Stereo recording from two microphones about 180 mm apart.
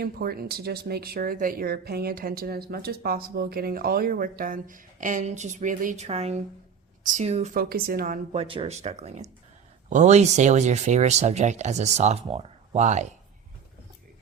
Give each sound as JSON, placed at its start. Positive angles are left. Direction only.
{"t": 0.0, "sound": "speech", "side_deg": -55}
{"t": 7.5, "sound": "speech", "side_deg": -55}
{"t": 8.3, "sound": "speech", "side_deg": -30}